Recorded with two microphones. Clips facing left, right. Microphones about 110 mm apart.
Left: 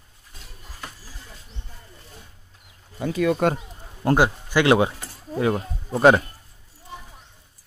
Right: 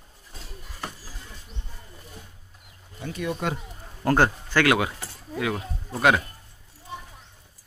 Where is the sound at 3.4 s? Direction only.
55° left (ahead or behind).